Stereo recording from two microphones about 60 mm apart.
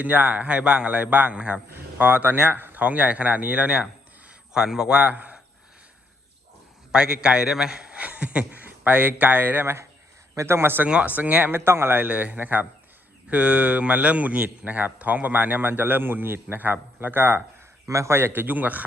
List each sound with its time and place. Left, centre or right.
0.0 s speech: right
2.0 s speech: right
4.3 s speech: centre
6.9 s a man's voice: centre
10.3 s a man's voice: right
10.8 s speech: right
11.5 s speech: right
17.8 s a man's voice: right
18.4 s speech: right